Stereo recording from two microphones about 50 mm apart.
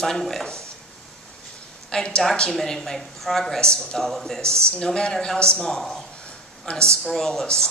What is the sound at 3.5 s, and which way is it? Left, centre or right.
Speech, centre.